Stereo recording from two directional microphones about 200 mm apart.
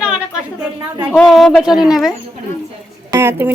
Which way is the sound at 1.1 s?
Centre (ahead or behind).